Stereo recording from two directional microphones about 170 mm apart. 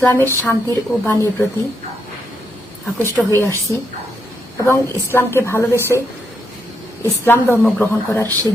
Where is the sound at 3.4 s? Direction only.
15° left (ahead or behind).